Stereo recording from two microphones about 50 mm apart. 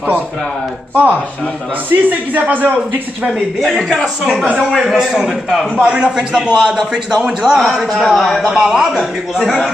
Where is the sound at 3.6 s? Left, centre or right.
Centre.